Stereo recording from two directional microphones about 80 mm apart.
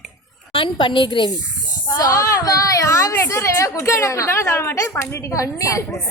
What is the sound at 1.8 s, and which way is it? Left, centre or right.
A woman's voice, left.